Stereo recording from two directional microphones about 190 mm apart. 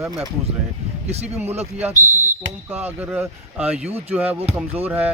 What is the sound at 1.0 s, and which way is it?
Speech, 35° right (ahead or behind).